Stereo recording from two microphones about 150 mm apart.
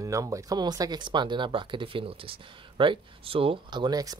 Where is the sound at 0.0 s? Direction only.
20° right (ahead or behind).